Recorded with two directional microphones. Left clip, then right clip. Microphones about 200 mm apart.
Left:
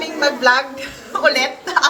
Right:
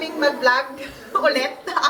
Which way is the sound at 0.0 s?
15° left (ahead or behind).